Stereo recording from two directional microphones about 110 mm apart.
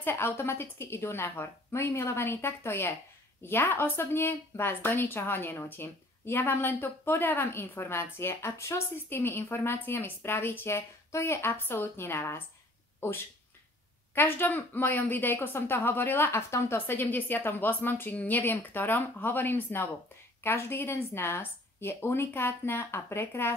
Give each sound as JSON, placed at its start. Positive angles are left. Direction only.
{"t": 0.0, "sound": "a woman's voice", "side_deg": 20}
{"t": 14.1, "sound": "a woman's voice", "side_deg": 20}